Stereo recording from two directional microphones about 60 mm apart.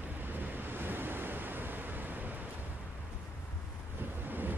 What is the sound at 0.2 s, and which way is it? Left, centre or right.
Waves, right.